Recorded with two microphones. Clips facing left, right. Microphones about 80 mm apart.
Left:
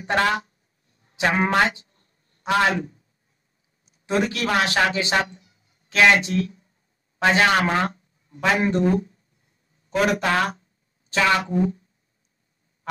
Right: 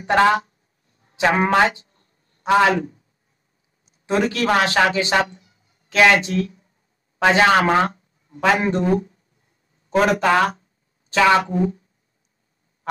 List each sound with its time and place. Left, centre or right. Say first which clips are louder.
0.1 s speech: right 6 dB; right
1.7 s a sound: right 1 dB; right
4.1 s a man's voice: right 3 dB; right
9.8 s a man's voice: right 4 dB; right